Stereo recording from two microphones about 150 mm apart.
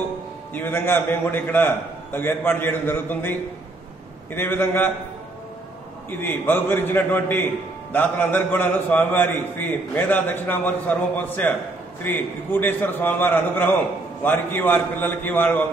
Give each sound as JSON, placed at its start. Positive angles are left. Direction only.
{"t": 0.6, "sound": "a man's voice", "side_deg": 15}
{"t": 6.0, "sound": "a man's voice", "side_deg": 15}